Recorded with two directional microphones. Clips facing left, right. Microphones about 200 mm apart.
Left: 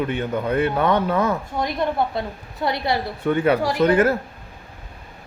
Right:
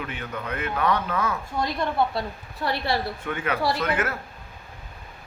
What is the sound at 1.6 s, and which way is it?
A woman's voice, 20° left (ahead or behind).